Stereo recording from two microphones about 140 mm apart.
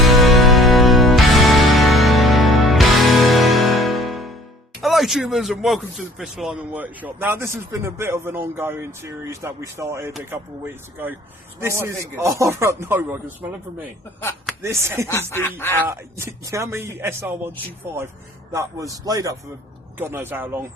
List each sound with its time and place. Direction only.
0.0 s music: centre (ahead or behind)
4.8 s a man's voice: centre (ahead or behind)
14.6 s speech: 20° right (ahead or behind)
15.1 s speech: 15° left (ahead or behind)
15.8 s a man's voice: 20° right (ahead or behind)
18.5 s a man's voice: 20° right (ahead or behind)